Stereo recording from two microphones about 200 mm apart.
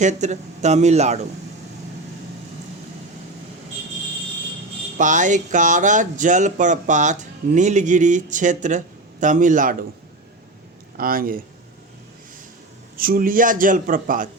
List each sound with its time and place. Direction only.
0.0 s speech: 35° right (ahead or behind)
4.9 s speech: 40° right (ahead or behind)
10.9 s speech: 45° right (ahead or behind)
13.0 s speech: 45° right (ahead or behind)